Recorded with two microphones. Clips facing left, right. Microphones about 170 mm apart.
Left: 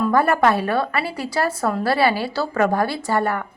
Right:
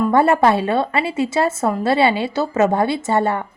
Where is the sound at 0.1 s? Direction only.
25° right (ahead or behind).